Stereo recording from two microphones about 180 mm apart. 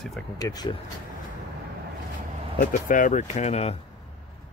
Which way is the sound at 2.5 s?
50° left (ahead or behind).